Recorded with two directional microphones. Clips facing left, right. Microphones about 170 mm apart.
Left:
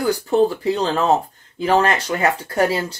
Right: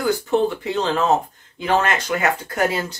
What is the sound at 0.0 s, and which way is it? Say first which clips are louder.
Speech: left 2 dB; 35° left (ahead or behind).